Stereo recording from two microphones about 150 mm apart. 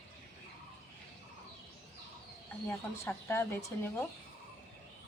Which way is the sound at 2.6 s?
15° left (ahead or behind).